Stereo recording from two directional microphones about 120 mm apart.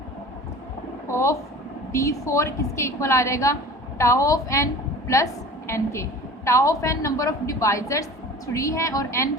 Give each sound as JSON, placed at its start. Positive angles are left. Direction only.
{"t": 1.1, "sound": "a woman's voice", "side_deg": 25}